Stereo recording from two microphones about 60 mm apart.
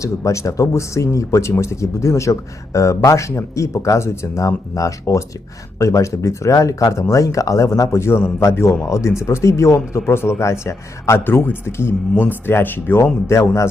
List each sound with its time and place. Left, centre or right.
0.0 s speech: left
11.2 s speech: left
13.2 s speech: left